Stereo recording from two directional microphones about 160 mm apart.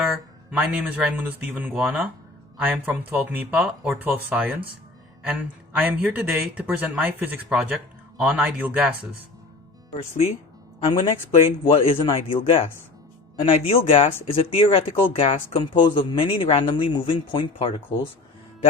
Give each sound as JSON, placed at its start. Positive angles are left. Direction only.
{"t": 0.1, "sound": "speech", "side_deg": -5}
{"t": 9.9, "sound": "speech", "side_deg": 40}